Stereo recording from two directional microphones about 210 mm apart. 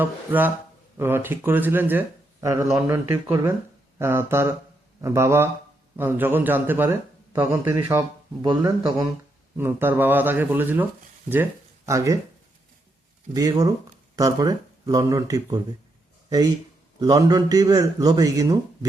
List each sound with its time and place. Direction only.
0.0 s speech: 10° right (ahead or behind)
11.9 s speech: 15° right (ahead or behind)
13.3 s speech: 20° right (ahead or behind)
17.0 s speech: 15° right (ahead or behind)